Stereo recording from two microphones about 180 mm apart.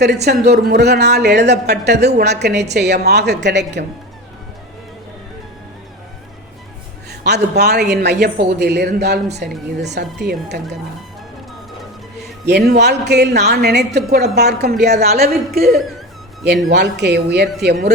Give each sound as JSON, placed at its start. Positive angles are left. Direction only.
{"t": 0.0, "sound": "a woman's voice", "side_deg": -65}
{"t": 7.1, "sound": "a woman's voice", "side_deg": -65}
{"t": 12.5, "sound": "a woman's voice", "side_deg": -65}
{"t": 15.7, "sound": "speech", "side_deg": 0}
{"t": 16.6, "sound": "a woman's voice", "side_deg": -70}